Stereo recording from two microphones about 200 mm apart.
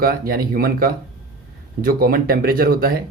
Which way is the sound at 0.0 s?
45° right (ahead or behind).